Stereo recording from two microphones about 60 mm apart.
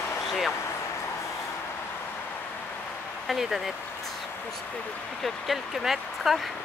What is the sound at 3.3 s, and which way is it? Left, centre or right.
Speech, centre.